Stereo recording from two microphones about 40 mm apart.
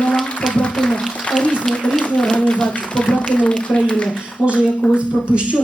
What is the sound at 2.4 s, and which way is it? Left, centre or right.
Speech, left.